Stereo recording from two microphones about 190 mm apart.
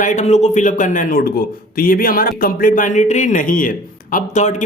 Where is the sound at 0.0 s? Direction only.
40° left (ahead or behind).